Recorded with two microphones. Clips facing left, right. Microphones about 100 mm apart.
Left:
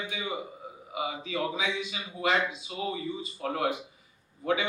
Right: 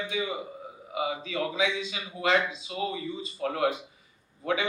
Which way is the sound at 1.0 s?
25° left (ahead or behind).